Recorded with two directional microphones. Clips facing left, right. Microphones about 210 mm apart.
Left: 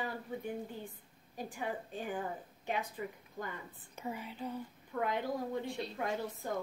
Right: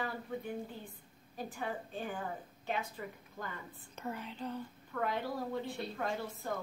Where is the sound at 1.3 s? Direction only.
15° left (ahead or behind).